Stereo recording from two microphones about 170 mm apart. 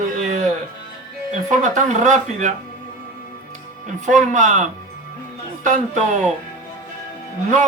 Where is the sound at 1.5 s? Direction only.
45° right (ahead or behind).